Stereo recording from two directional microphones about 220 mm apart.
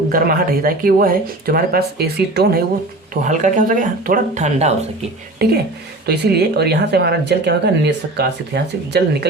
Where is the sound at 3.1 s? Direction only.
35° right (ahead or behind).